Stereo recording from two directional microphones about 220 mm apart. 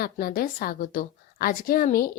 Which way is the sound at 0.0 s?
45° left (ahead or behind).